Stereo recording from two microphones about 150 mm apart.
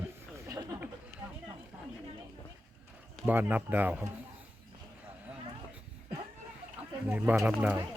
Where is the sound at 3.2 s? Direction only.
10° right (ahead or behind).